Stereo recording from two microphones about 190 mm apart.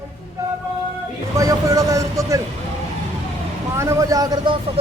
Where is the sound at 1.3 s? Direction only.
15° right (ahead or behind).